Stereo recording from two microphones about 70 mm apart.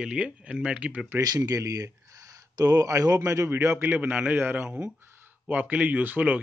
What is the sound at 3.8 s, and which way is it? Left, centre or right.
A man's voice, right.